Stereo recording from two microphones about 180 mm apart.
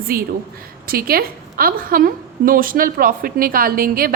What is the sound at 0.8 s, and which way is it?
A woman's voice, 55° right (ahead or behind).